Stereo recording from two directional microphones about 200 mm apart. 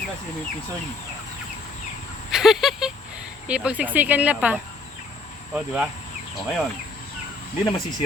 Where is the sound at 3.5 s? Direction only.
5° right (ahead or behind).